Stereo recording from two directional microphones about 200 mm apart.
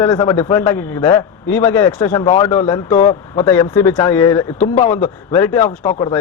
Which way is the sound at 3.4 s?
15° left (ahead or behind).